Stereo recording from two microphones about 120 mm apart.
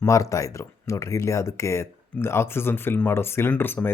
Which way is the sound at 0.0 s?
25° left (ahead or behind).